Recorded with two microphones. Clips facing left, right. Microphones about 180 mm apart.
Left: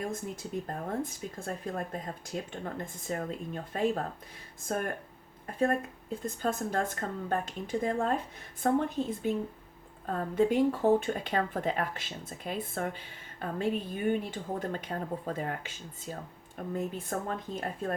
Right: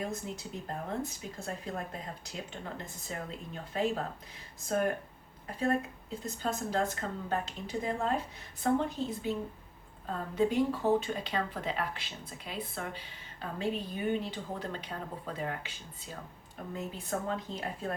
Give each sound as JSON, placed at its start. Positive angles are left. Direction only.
{"t": 0.1, "sound": "speech", "side_deg": 50}
{"t": 5.5, "sound": "speech", "side_deg": 50}